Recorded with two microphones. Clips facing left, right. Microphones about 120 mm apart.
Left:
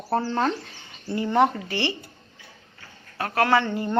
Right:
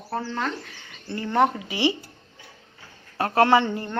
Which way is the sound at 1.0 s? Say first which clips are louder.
Left 4 dB; 15° left (ahead or behind).